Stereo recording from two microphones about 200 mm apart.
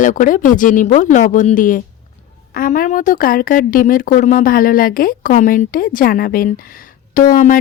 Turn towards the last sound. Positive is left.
turn(degrees=40)  # may be behind; listen again after turning